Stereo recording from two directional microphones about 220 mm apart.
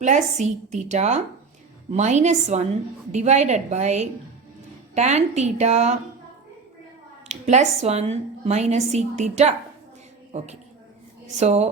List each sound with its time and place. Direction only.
0.0 s a woman's voice: 30° right (ahead or behind)
7.3 s a woman's voice: 30° right (ahead or behind)